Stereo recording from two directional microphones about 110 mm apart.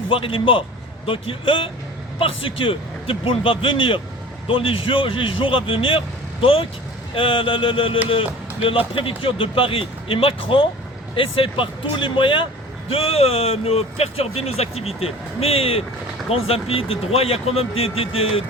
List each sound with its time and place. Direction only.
0.1 s speech: 55° left (ahead or behind)